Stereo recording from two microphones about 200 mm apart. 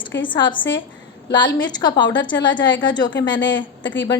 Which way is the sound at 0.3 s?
25° left (ahead or behind).